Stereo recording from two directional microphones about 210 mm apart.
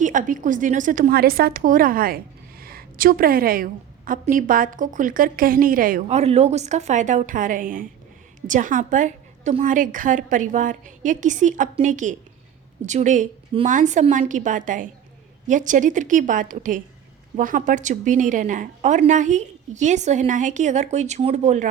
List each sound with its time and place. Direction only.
0.0 s a woman's voice: 40° right (ahead or behind)